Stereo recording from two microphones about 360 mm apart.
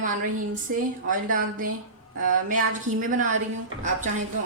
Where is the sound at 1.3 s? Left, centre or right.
Right.